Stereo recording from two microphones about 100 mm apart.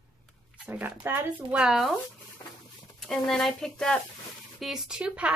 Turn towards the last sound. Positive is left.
turn(degrees=-10)  # may be behind; listen again after turning